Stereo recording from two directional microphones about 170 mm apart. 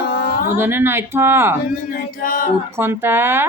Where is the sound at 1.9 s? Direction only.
55° left (ahead or behind).